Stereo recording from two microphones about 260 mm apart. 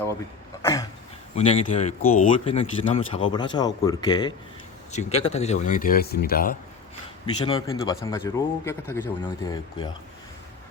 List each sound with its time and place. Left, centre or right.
0.6 s a sound: centre
1.4 s speech: left
7.3 s speech: centre